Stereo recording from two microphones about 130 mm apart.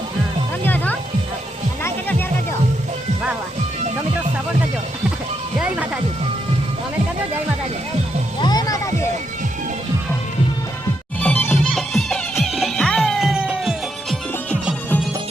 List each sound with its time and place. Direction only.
0.6 s music: 15° left (ahead or behind)
5.5 s music: 10° right (ahead or behind)
8.4 s music: 30° left (ahead or behind)
11.2 s music: 10° left (ahead or behind)
11.5 s music: centre (ahead or behind)